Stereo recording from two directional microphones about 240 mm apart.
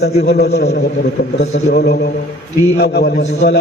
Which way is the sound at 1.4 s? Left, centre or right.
Left.